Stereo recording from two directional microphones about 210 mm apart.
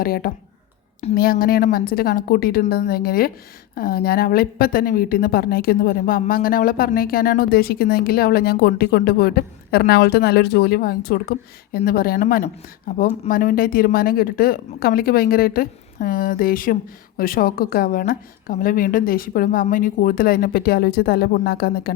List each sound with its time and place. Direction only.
0.0 s a woman's voice: 45° left (ahead or behind)